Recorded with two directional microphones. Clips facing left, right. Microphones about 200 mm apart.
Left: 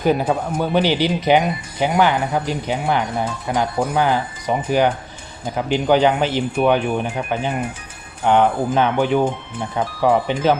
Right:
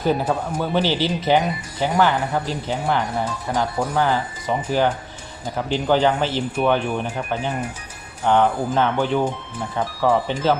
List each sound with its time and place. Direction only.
0.0 s speech: 15° left (ahead or behind)